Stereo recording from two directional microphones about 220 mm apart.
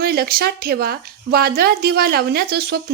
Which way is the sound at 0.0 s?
45° right (ahead or behind).